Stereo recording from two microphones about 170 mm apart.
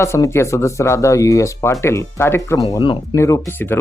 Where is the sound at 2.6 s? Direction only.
25° left (ahead or behind).